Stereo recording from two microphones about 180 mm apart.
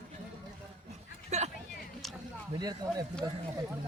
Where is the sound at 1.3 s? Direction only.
35° right (ahead or behind).